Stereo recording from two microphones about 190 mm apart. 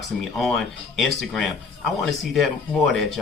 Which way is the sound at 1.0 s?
Centre (ahead or behind).